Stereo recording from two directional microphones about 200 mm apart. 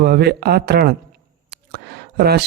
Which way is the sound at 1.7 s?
55° right (ahead or behind).